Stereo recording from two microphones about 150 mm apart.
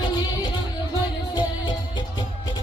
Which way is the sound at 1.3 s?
30° left (ahead or behind).